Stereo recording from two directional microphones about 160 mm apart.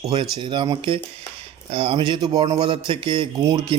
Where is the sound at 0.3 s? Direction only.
30° right (ahead or behind).